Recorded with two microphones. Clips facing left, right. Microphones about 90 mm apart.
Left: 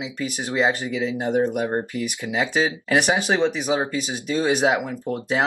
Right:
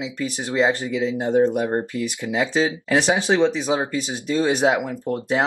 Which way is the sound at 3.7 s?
15° left (ahead or behind).